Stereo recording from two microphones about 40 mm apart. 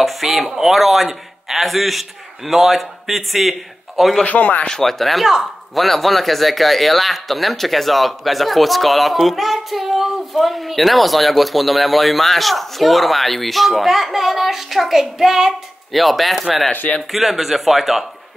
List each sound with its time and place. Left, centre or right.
0.0 s a sound: centre
0.5 s speech: centre
4.2 s speech: left
4.6 s speech: centre